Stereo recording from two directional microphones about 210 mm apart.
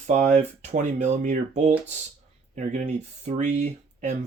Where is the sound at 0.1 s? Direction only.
35° right (ahead or behind).